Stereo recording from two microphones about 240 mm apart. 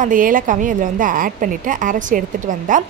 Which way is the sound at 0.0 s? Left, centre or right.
Right.